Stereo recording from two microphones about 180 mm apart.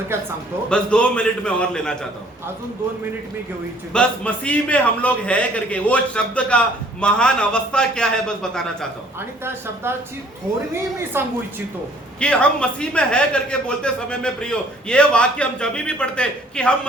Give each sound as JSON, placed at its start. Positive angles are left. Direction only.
{"t": 0.1, "sound": "a woman's voice", "side_deg": -15}
{"t": 0.7, "sound": "a man's voice", "side_deg": 5}
{"t": 3.9, "sound": "a man's voice", "side_deg": 5}
{"t": 11.1, "sound": "a woman's voice", "side_deg": -10}
{"t": 12.2, "sound": "a man's voice", "side_deg": 5}